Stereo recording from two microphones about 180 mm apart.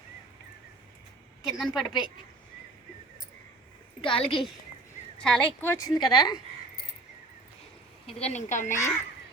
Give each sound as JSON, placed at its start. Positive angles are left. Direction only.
{"t": 1.5, "sound": "a woman's voice", "side_deg": 0}
{"t": 4.0, "sound": "a woman's voice", "side_deg": 30}
{"t": 5.2, "sound": "speech", "side_deg": 5}
{"t": 6.0, "sound": "a woman's voice", "side_deg": 25}
{"t": 8.0, "sound": "speech", "side_deg": 40}